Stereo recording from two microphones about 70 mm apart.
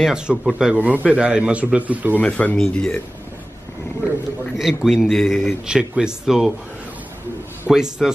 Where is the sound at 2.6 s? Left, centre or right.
Centre.